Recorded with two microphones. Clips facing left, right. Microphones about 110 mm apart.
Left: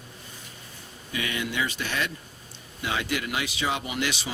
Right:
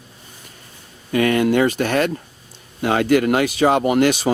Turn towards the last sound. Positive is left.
turn(degrees=-50)  # may be behind; listen again after turning